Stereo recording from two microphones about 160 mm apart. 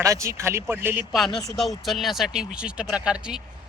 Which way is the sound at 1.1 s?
Centre (ahead or behind).